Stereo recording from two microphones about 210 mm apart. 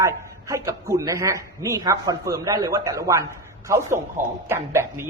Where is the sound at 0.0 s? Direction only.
15° right (ahead or behind).